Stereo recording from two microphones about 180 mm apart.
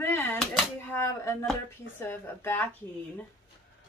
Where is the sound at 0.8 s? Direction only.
15° left (ahead or behind).